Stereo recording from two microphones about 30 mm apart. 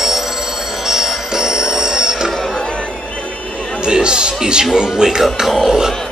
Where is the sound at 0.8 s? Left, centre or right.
Centre.